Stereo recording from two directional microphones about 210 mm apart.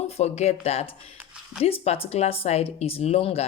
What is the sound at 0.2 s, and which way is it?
Speech, 30° left (ahead or behind).